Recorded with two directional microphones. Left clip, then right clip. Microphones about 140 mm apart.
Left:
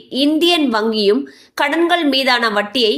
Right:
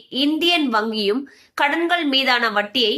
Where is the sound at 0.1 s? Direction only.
30° left (ahead or behind).